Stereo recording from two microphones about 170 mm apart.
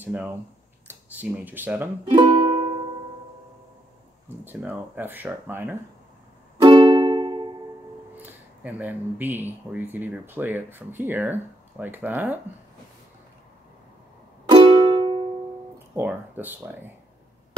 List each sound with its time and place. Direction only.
0.0 s speech: 10° right (ahead or behind)
2.0 s music: 25° right (ahead or behind)
4.5 s speech: 10° right (ahead or behind)
6.6 s music: 25° right (ahead or behind)
8.2 s speech: 10° right (ahead or behind)
14.5 s music: 30° right (ahead or behind)
15.9 s speech: 10° right (ahead or behind)